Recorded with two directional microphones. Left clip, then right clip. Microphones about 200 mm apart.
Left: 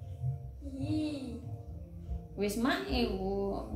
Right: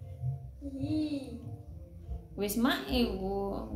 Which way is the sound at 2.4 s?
35° right (ahead or behind).